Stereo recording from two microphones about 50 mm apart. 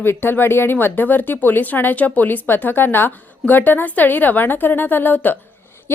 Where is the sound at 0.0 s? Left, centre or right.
Left.